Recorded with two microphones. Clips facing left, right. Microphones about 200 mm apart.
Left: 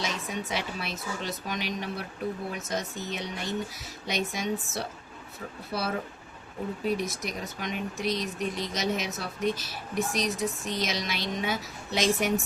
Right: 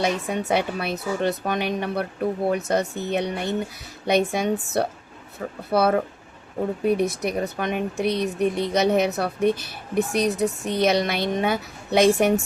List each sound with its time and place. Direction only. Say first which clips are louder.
0.0 s speech: right 9 dB; 60° right (ahead or behind)